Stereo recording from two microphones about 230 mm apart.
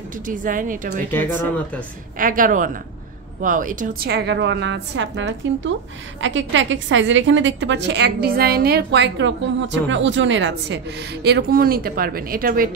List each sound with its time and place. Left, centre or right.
0.3 s a woman's voice: right
1.1 s speech: centre
2.1 s a woman's voice: right